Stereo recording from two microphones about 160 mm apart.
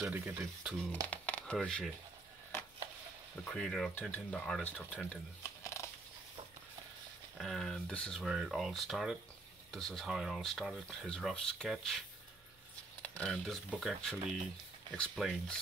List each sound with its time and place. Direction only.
0.0 s speech: 10° right (ahead or behind)
1.1 s a sound: 10° left (ahead or behind)
3.4 s speech: 5° left (ahead or behind)
5.4 s a sound: 20° left (ahead or behind)
7.3 s speech: centre (ahead or behind)
13.0 s speech: 5° left (ahead or behind)